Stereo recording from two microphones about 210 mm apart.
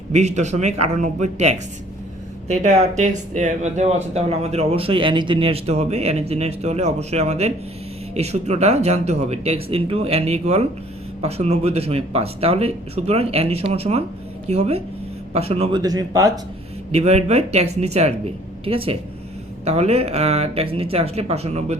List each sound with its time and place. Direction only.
0.1 s speech: 30° right (ahead or behind)
15.8 s speech: 20° right (ahead or behind)
16.9 s speech: 30° right (ahead or behind)